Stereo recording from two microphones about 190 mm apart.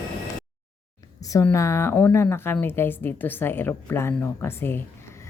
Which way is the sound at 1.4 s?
15° left (ahead or behind).